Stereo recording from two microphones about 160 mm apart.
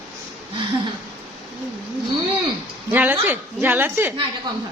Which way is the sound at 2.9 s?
10° right (ahead or behind).